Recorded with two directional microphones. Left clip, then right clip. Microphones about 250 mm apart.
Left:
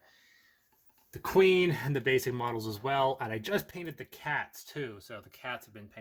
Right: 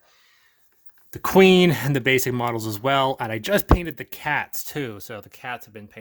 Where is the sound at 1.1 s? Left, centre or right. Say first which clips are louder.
Right 9 dB; right.